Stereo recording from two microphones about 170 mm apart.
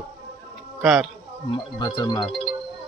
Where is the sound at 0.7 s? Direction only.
Centre (ahead or behind).